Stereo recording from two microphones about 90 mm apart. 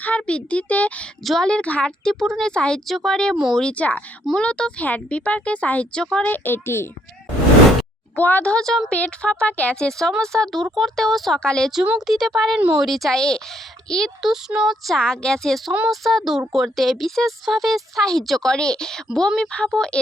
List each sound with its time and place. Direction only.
0.0 s a child's voice: 15° left (ahead or behind)
1.2 s speech: 5° left (ahead or behind)
3.3 s speech: 5° right (ahead or behind)
3.6 s speech: 15° left (ahead or behind)
6.3 s a child's voice: 25° left (ahead or behind)
8.1 s speech: 20° left (ahead or behind)